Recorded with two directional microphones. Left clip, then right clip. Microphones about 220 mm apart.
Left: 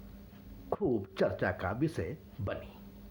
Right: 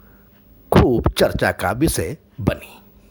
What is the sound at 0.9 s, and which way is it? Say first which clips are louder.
Speech: right 14 dB; 45° right (ahead or behind).